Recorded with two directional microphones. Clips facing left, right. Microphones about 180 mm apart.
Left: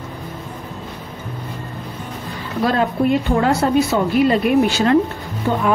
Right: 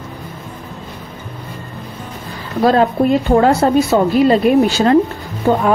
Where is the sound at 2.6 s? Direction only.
35° right (ahead or behind).